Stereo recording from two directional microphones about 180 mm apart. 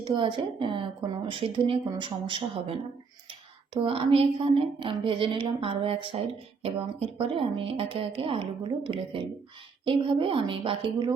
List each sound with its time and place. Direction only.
0.0 s a woman's voice: 25° right (ahead or behind)
3.8 s a woman's voice: 30° right (ahead or behind)